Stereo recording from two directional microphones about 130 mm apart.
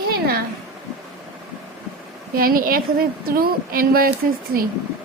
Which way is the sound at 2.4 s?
90° right.